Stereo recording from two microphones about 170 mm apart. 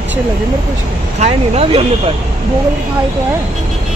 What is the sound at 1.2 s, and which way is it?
Speech, 35° right (ahead or behind).